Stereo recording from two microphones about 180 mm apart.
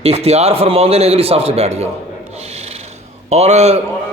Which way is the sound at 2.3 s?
35° right (ahead or behind).